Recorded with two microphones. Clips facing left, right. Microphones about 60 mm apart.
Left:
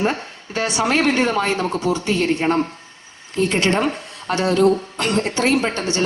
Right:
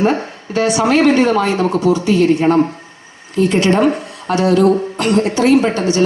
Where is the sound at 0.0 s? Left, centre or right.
Right.